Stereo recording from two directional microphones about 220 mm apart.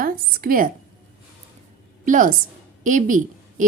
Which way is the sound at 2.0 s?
35° right (ahead or behind).